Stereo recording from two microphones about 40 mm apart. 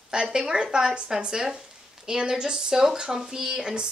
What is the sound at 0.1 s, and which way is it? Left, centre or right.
A woman's voice, centre.